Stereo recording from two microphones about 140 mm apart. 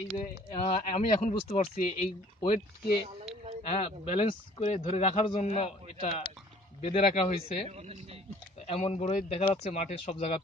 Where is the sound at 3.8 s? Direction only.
50° left (ahead or behind).